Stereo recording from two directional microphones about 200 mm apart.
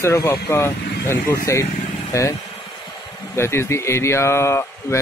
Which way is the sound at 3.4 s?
15° left (ahead or behind).